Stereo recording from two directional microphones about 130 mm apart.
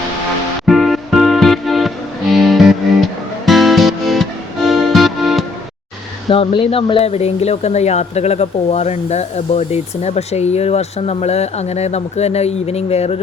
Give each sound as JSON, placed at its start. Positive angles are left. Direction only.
{"t": 0.6, "sound": "music", "side_deg": 0}
{"t": 6.3, "sound": "speech", "side_deg": 45}